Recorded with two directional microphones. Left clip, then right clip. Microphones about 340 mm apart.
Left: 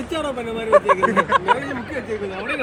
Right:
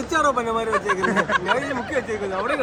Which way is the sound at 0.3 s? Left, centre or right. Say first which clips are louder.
Left 5 dB; centre.